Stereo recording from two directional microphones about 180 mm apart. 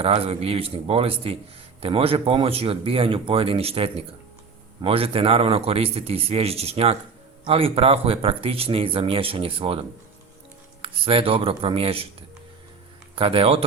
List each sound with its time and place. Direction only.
0.0 s speech: 30° right (ahead or behind)
10.8 s speech: 30° right (ahead or behind)
13.1 s speech: 30° right (ahead or behind)